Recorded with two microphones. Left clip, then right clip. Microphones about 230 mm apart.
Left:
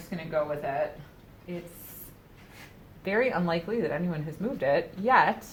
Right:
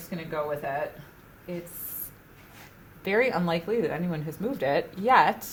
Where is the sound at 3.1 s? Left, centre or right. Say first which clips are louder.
Right 2 dB; right.